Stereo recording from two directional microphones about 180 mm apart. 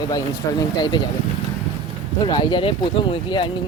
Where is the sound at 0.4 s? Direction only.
15° left (ahead or behind).